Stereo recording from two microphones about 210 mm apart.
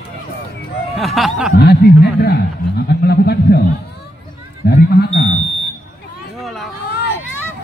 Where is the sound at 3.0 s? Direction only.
50° left (ahead or behind).